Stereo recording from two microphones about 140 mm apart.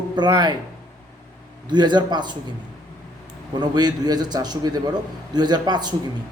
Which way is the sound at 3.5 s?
30° right (ahead or behind).